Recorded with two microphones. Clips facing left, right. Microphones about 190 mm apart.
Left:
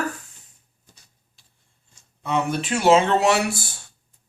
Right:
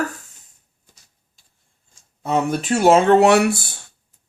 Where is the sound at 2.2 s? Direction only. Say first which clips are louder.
Right 3 dB; 40° right (ahead or behind); by 3.6 s 60° right (ahead or behind).